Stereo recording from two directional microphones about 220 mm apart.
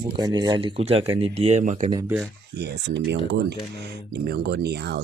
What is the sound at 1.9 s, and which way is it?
Speech, 15° right (ahead or behind).